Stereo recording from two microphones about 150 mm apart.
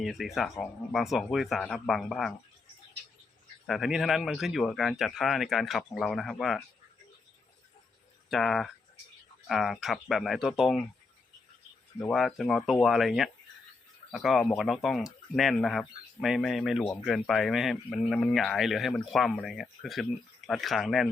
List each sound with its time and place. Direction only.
0.0 s speech: centre (ahead or behind)
3.7 s speech: centre (ahead or behind)
8.3 s speech: centre (ahead or behind)
11.9 s speech: 5° left (ahead or behind)